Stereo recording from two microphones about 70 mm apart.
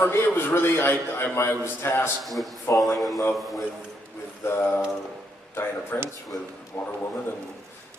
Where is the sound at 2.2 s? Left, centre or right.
Centre.